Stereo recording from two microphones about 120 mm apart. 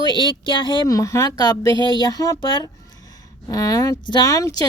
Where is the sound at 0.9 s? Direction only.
25° left (ahead or behind).